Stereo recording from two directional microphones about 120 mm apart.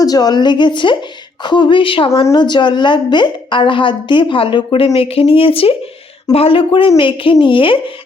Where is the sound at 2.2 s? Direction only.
35° left (ahead or behind).